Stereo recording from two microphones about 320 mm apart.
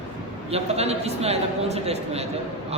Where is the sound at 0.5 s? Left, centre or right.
Centre.